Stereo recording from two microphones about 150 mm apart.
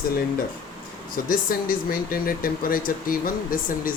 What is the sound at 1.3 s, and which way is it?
Speech, 70° left (ahead or behind).